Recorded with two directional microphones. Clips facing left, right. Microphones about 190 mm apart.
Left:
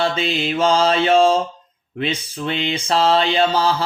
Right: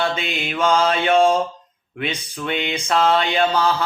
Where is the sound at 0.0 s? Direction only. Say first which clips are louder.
Left 3 dB; 30° left (ahead or behind).